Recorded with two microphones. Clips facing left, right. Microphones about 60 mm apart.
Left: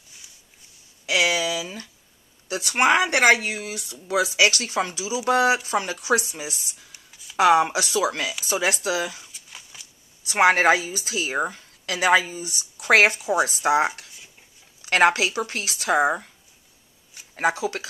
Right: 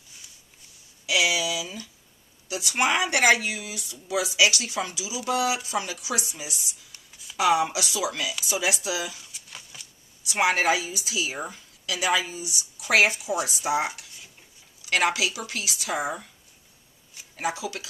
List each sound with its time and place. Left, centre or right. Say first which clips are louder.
1.0 s a sound: left 2 dB; left
2.4 s speech: left 5 dB; left
9.3 s a sound: even; centre
10.2 s speech: left 5 dB; left
14.9 s speech: left 5 dB; left
17.4 s speech: left 6 dB; left